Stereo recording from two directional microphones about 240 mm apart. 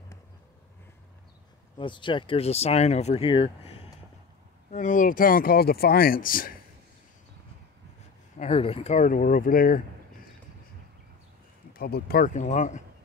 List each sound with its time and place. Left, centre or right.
1.8 s speech: centre; by 6.5 s left
8.4 s speech: left
11.7 s speech: left